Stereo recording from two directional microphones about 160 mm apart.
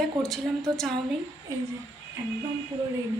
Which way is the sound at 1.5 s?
20° right (ahead or behind).